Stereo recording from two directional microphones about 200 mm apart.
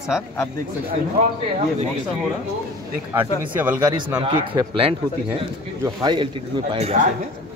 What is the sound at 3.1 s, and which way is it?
Speech, 10° right (ahead or behind).